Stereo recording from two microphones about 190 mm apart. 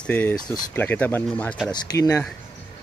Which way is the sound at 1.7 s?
20° left (ahead or behind).